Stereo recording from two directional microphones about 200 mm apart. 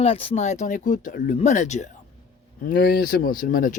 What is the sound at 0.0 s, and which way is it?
Speech, 30° left (ahead or behind).